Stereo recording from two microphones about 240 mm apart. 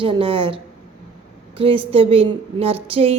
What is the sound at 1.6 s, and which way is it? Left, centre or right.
A woman's voice, right.